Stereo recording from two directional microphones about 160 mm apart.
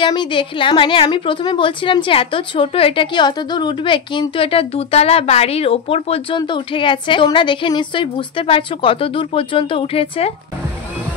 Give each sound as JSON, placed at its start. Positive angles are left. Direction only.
{"t": 0.0, "sound": "a woman's voice", "side_deg": 30}